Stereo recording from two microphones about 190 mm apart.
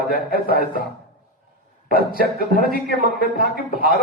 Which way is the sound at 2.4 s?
50° right (ahead or behind).